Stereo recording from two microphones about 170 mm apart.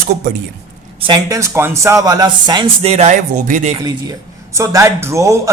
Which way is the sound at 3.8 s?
20° right (ahead or behind).